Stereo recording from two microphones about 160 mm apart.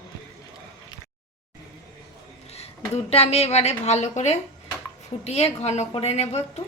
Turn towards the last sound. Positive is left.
turn(degrees=40)  # may be behind; listen again after turning